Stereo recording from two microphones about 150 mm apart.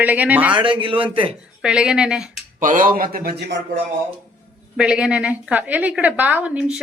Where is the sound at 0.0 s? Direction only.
10° right (ahead or behind).